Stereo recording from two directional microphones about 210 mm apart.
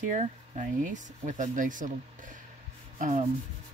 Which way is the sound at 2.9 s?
40° right (ahead or behind).